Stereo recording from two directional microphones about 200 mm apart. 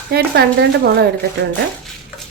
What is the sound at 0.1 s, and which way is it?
Speech, 55° right (ahead or behind).